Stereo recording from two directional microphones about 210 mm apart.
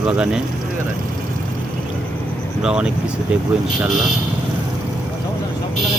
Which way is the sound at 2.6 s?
5° right (ahead or behind).